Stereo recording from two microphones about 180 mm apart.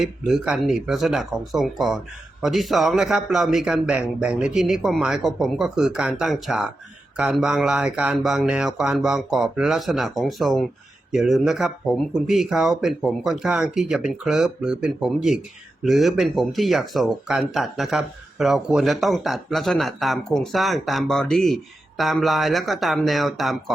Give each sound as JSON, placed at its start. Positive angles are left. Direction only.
{"t": 0.0, "sound": "speech", "side_deg": -5}